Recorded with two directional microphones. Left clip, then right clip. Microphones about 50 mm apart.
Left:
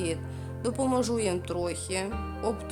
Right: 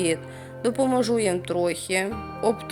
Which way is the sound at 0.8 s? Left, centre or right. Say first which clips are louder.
Right 5 dB; centre.